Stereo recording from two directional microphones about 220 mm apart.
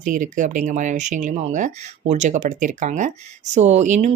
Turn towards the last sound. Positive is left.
turn(degrees=-35)  # may be behind; listen again after turning